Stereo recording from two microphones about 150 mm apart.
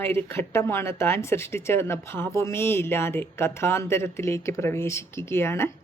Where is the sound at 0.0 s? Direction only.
15° left (ahead or behind).